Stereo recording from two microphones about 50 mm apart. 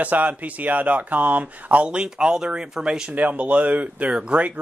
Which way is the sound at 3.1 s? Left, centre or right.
Right.